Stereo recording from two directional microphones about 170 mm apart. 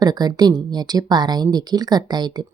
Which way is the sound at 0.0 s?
25° right (ahead or behind).